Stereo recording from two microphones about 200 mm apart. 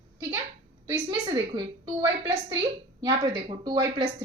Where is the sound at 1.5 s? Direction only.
20° right (ahead or behind).